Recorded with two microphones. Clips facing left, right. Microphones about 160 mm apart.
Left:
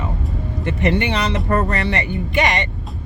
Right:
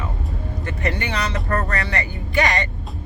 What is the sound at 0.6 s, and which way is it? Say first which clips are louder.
Speech: left 7 dB; 20° left (ahead or behind).